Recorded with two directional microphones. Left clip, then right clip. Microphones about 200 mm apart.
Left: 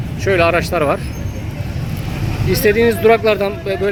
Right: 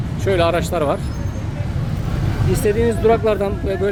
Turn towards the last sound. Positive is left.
turn(degrees=-5)  # may be behind; listen again after turning